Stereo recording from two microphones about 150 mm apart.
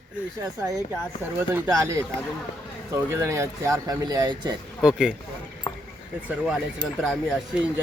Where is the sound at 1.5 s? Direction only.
15° right (ahead or behind).